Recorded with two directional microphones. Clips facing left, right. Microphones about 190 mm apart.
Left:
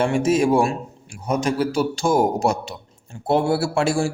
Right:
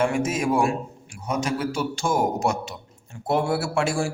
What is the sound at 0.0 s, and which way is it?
A man's voice, 30° left (ahead or behind).